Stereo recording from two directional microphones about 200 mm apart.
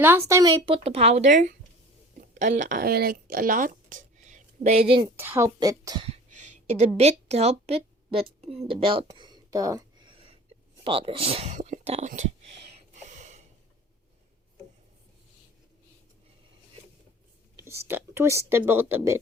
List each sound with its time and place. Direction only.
0.0 s a woman's voice: 15° right (ahead or behind); by 1.5 s 40° right (ahead or behind)
2.6 s speech: 40° right (ahead or behind)
5.1 s speech: 10° right (ahead or behind)
6.1 s a sound: 35° right (ahead or behind)
10.8 s speech: 25° right (ahead or behind)
12.9 s a sound: 40° right (ahead or behind)
17.8 s speech: 10° right (ahead or behind)